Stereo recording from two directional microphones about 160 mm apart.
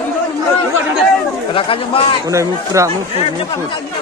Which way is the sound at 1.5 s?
35° left (ahead or behind).